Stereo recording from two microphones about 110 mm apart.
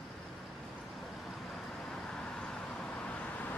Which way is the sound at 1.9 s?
5° left (ahead or behind).